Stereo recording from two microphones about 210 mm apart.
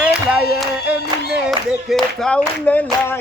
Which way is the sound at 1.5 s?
Centre (ahead or behind).